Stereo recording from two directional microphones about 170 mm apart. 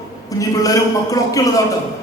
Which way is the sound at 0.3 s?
20° left (ahead or behind).